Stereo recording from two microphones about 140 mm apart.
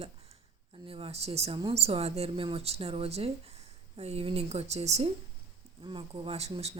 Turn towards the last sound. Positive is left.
turn(degrees=-45)  # may be behind; listen again after turning